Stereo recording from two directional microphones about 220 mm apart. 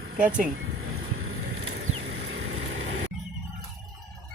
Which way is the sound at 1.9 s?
65° right (ahead or behind).